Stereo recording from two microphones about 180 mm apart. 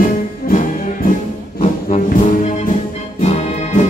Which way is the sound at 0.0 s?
50° left (ahead or behind).